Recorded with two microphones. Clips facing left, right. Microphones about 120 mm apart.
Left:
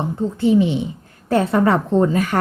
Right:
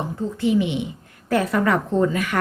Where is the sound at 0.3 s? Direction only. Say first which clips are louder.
Left 4 dB; 30° left (ahead or behind).